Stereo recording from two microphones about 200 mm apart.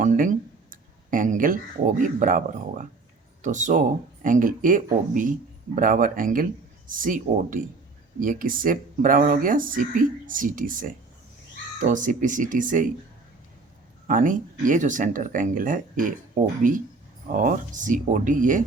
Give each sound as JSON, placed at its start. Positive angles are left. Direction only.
{"t": 0.0, "sound": "speech", "side_deg": -40}
{"t": 14.1, "sound": "speech", "side_deg": -40}